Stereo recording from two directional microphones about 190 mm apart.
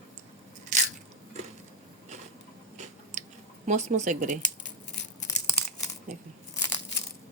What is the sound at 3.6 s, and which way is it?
Speech, 40° right (ahead or behind).